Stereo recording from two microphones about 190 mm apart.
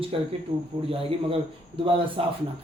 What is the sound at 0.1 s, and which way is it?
Speech, 30° right (ahead or behind).